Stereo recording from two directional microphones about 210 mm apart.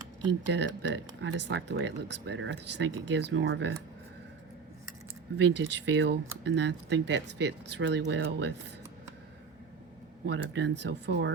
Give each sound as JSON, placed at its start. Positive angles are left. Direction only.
{"t": 0.4, "sound": "speech", "side_deg": -55}
{"t": 5.4, "sound": "speech", "side_deg": -55}
{"t": 10.2, "sound": "speech", "side_deg": -60}